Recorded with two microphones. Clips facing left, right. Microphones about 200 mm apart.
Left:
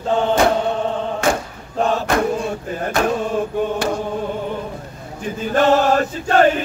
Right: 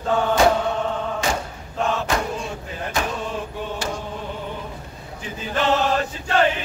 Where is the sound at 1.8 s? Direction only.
35° left (ahead or behind).